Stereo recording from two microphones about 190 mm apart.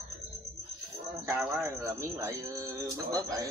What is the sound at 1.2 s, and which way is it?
Speech, 10° right (ahead or behind).